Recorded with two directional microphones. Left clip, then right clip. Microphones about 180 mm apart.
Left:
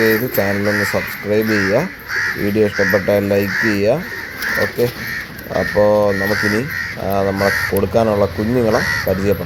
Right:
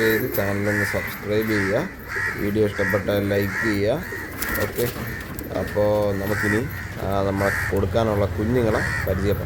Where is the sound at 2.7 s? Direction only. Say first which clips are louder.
Left 7 dB; centre (ahead or behind).